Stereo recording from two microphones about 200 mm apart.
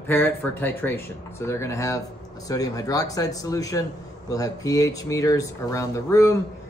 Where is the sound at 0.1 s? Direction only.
10° left (ahead or behind).